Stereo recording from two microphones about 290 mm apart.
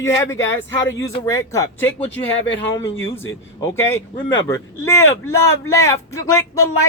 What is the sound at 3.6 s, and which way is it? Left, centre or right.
Speech, centre.